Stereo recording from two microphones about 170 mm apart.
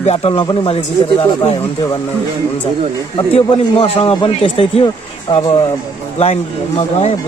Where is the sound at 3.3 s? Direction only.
35° left (ahead or behind).